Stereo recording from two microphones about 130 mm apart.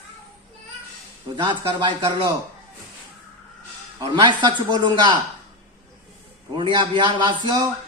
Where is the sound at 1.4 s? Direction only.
35° right (ahead or behind).